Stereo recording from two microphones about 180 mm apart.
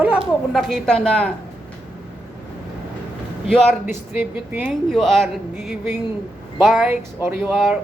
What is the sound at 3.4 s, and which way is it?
Speech, 10° right (ahead or behind).